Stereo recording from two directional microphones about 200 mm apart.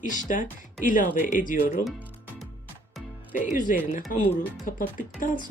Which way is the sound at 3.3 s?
40° left (ahead or behind).